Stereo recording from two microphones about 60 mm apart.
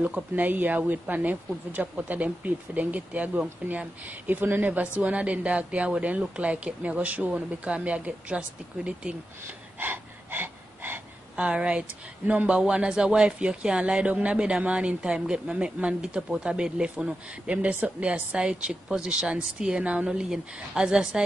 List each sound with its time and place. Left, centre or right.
0.0 s a woman's voice: right
9.8 s a sound: right
11.3 s a woman's voice: centre